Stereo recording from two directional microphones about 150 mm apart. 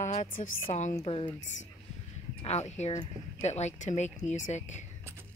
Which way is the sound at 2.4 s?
45° left (ahead or behind).